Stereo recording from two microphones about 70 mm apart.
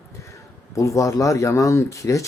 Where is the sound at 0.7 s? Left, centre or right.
Left.